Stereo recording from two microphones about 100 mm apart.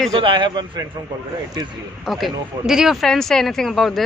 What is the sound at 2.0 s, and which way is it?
Speech, centre (ahead or behind).